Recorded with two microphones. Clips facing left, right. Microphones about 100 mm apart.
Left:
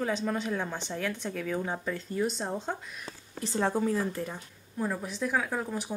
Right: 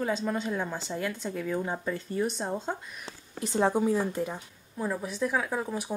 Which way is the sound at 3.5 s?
25° right (ahead or behind).